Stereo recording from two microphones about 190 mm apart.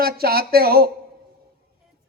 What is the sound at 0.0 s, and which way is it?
Speech, 55° right (ahead or behind).